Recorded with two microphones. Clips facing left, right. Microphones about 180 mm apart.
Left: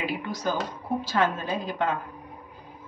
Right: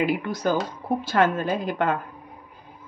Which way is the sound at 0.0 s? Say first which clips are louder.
Right 5 dB; 55° right (ahead or behind).